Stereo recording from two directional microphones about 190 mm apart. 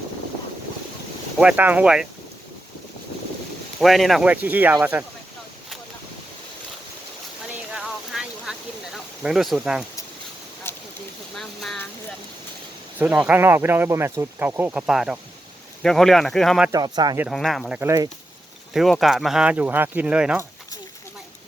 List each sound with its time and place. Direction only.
1.4 s speech: 5° right (ahead or behind)
3.8 s speech: centre (ahead or behind)
7.5 s a sound: 5° right (ahead or behind)
11.3 s a sound: centre (ahead or behind)
13.0 s speech: 5° right (ahead or behind)
16.7 s speech: 20° right (ahead or behind)
17.2 s speech: centre (ahead or behind)
17.7 s speech: 15° right (ahead or behind)
18.7 s speech: centre (ahead or behind)